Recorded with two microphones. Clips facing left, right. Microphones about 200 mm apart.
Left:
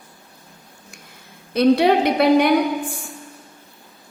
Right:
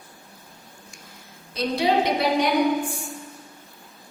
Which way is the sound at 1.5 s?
60° left (ahead or behind).